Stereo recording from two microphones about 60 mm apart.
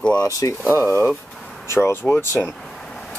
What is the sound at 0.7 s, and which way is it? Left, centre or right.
Speech, left.